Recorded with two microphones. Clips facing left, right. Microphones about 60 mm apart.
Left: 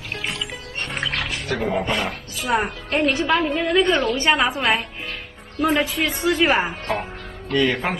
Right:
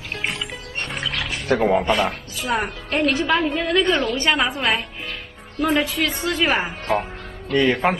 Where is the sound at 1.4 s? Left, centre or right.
Right.